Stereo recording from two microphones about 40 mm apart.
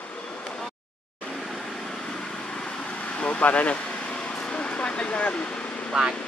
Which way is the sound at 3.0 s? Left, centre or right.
Left.